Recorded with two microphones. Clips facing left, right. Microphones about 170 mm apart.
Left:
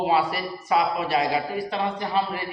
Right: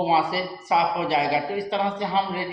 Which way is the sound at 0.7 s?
25° right (ahead or behind).